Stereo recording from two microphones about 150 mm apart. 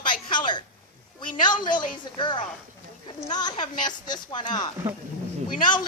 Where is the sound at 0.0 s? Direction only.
30° left (ahead or behind).